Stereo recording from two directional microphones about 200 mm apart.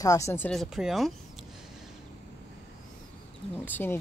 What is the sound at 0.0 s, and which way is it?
Speech, 15° left (ahead or behind).